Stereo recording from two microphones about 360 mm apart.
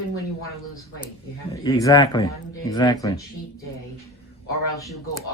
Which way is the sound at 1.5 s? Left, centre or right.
Centre.